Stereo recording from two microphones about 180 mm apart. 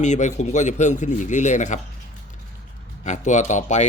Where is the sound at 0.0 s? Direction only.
40° left (ahead or behind).